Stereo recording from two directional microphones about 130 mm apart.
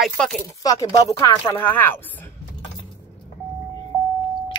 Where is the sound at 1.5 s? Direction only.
15° left (ahead or behind).